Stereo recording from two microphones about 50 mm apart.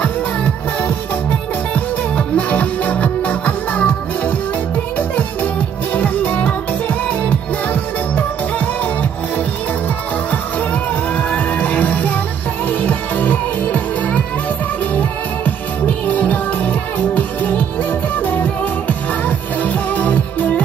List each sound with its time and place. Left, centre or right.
1.7 s music: left
10.3 s music: left
16.1 s music: left